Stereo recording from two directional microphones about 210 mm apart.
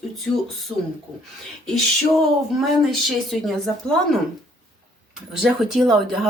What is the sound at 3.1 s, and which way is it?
Speech, centre (ahead or behind).